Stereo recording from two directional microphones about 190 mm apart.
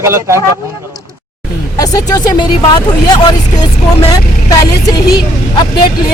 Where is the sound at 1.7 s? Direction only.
20° left (ahead or behind).